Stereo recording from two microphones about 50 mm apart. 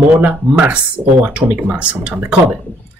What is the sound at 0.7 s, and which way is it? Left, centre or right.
Speech, right.